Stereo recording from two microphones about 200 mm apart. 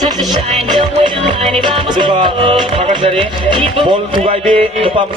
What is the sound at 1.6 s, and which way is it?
Music, 25° right (ahead or behind).